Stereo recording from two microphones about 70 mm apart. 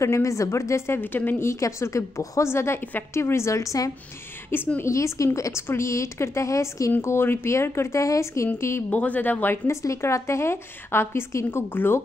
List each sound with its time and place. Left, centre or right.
0.0 s a woman's voice: left
1.5 s a woman's voice: left
4.5 s a woman's voice: left
4.8 s a woman's voice: left
6.9 s a woman's voice: left
8.9 s speech: left
9.7 s a woman's voice: left